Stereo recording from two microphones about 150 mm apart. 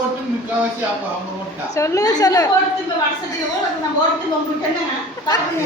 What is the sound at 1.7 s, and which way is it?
Speech, 20° left (ahead or behind).